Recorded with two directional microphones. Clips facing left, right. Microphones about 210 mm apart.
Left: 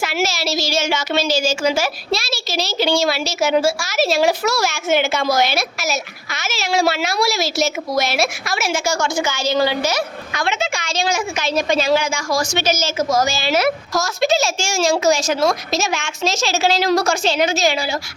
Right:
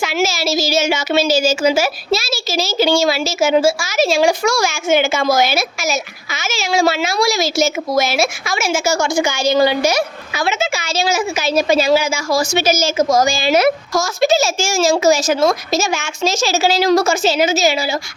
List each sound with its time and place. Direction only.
0.0 s a woman's voice: centre (ahead or behind); by 13.7 s 15° right (ahead or behind)
13.9 s a woman's voice: centre (ahead or behind)